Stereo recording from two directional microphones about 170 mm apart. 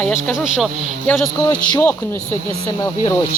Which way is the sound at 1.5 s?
25° left (ahead or behind).